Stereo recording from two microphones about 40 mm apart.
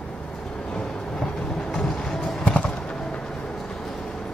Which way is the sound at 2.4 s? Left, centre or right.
Left.